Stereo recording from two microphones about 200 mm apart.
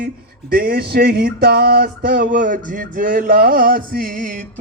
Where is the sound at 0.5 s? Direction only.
50° right (ahead or behind).